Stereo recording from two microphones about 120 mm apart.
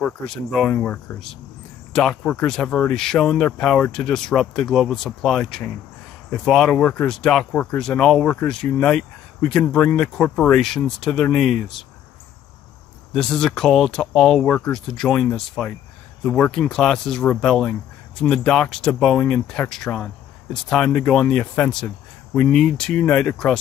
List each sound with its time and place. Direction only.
0.0 s speech: 5° left (ahead or behind)
0.7 s speech: 15° left (ahead or behind)
1.9 s speech: 5° left (ahead or behind)
13.1 s speech: 5° left (ahead or behind)